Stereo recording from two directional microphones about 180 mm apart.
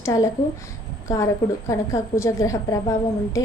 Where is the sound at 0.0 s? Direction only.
20° left (ahead or behind).